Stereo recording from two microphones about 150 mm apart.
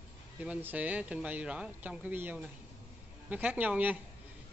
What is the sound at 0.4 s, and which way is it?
Speech, 10° right (ahead or behind).